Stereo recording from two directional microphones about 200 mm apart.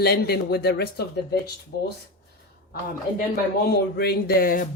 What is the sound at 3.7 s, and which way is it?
Speech, 50° left (ahead or behind).